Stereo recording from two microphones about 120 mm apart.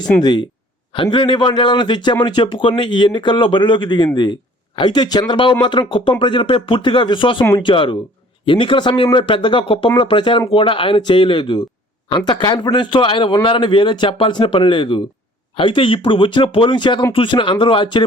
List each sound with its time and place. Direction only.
0.2 s a man's voice: 40° left (ahead or behind)